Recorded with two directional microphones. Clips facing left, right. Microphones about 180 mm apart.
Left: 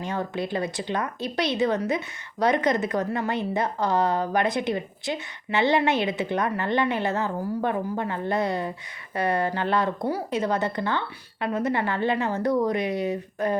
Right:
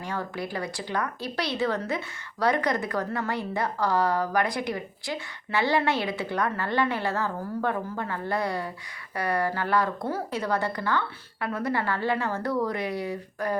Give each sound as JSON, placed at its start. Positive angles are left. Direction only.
{"t": 0.0, "sound": "speech", "side_deg": 20}